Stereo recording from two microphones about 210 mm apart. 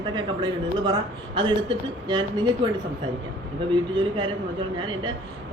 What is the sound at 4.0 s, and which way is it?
A woman's voice, 25° right (ahead or behind).